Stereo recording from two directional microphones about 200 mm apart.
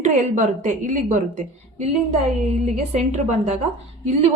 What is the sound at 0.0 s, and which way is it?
A woman's voice, 35° right (ahead or behind).